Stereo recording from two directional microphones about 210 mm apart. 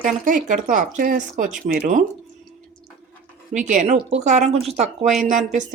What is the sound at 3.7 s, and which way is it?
Speech, 40° right (ahead or behind).